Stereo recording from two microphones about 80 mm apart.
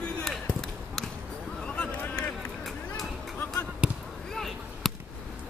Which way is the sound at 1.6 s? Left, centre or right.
Centre.